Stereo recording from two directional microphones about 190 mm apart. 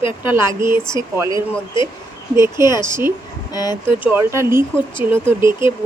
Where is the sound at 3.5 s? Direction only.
20° left (ahead or behind).